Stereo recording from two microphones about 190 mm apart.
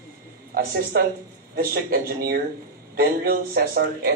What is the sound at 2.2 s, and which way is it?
Speech, 55° right (ahead or behind).